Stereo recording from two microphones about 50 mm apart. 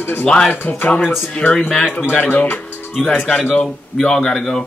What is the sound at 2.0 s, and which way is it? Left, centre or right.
Speech, left.